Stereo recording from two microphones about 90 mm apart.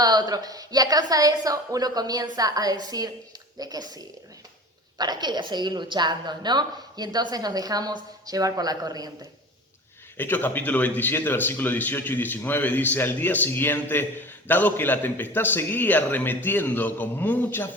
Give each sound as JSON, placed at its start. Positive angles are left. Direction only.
{"t": 0.0, "sound": "a woman's voice", "side_deg": -50}
{"t": 10.2, "sound": "speech", "side_deg": 20}